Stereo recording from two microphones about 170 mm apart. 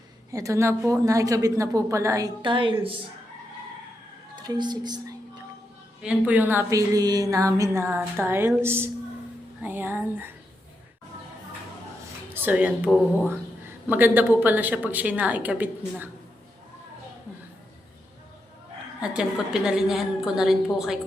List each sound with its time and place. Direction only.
0.3 s a woman's voice: 20° right (ahead or behind)
4.4 s speech: 25° right (ahead or behind)
6.0 s a woman's voice: 5° right (ahead or behind)
12.3 s a woman's voice: 10° right (ahead or behind)
18.9 s a woman's voice: 5° right (ahead or behind)